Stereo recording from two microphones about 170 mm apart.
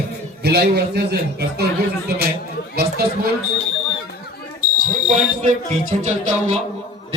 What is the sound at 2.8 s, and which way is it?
Speech, 65° right (ahead or behind).